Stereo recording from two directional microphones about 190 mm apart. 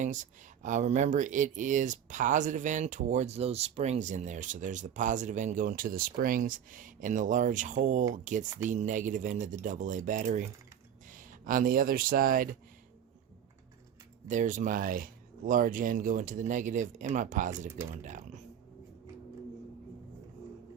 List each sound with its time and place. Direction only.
0.0 s speech: 40° right (ahead or behind)
14.3 s speech: 40° right (ahead or behind)